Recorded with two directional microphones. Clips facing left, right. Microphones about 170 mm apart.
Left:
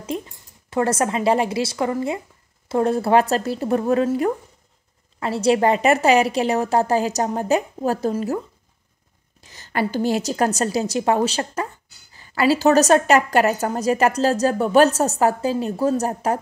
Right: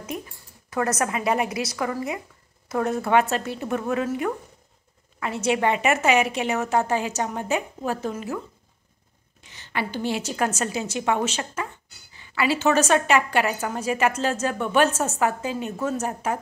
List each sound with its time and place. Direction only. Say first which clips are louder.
0.0 s a woman's voice: left 5 dB; 25° left (ahead or behind)
9.4 s a woman's voice: left 6 dB; 40° left (ahead or behind)